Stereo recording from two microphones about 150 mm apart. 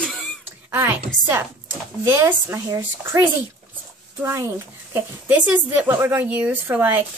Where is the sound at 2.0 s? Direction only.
15° right (ahead or behind).